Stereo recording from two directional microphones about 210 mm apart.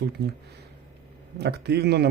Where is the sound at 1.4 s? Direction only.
50° right (ahead or behind).